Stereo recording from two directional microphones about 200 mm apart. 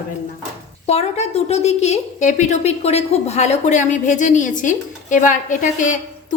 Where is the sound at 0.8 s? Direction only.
30° left (ahead or behind).